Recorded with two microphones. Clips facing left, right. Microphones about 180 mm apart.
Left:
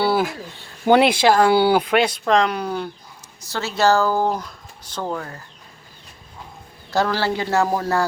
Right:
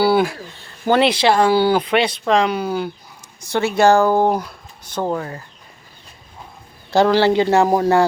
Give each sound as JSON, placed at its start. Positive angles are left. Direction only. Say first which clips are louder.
{"t": 0.0, "sound": "speech", "louder": "right 4 dB", "side_deg": 0}
{"t": 3.6, "sound": "speech", "louder": "right 6 dB", "side_deg": -55}
{"t": 4.0, "sound": "a man's voice", "louder": "right 5 dB", "side_deg": -20}
{"t": 6.9, "sound": "a man's voice", "louder": "right 7 dB", "side_deg": -25}